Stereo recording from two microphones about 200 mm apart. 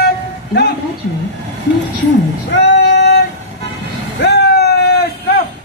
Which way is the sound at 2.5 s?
60° left (ahead or behind).